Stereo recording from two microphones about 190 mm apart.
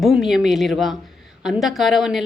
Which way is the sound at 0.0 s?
Centre (ahead or behind).